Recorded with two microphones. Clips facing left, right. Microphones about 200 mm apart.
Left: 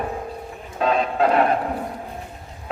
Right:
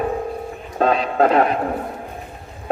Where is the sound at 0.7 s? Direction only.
45° right (ahead or behind).